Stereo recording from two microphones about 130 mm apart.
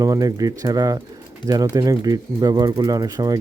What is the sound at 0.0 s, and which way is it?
Speech, 25° right (ahead or behind).